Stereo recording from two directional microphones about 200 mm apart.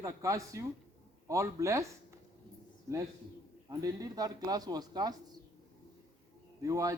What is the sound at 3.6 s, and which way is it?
Speech, 20° right (ahead or behind).